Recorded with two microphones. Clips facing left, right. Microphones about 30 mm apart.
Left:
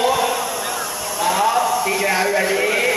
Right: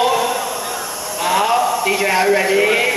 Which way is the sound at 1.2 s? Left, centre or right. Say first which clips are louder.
Right 2 dB; right.